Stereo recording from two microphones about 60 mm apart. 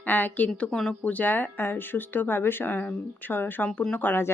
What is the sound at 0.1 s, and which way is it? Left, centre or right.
Speech, left.